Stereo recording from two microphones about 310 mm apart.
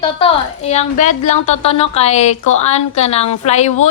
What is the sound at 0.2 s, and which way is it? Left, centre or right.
A woman's voice, left.